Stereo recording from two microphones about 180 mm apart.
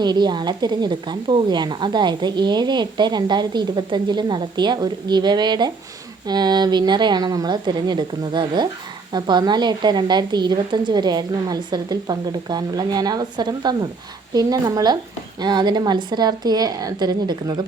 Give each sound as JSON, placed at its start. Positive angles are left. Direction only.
{"t": 0.0, "sound": "a woman's voice", "side_deg": -25}